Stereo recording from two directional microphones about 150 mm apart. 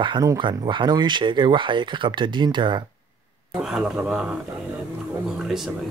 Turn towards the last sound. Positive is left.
turn(degrees=-5)  # may be behind; listen again after turning